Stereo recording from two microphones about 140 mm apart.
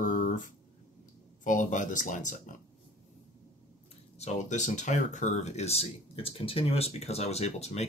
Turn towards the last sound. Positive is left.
turn(degrees=50)  # may be behind; listen again after turning